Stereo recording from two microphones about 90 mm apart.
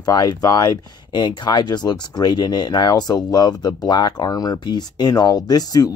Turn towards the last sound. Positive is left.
turn(degrees=45)  # may be behind; listen again after turning